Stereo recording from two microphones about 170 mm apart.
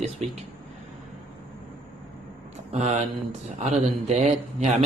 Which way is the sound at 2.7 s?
40° right (ahead or behind).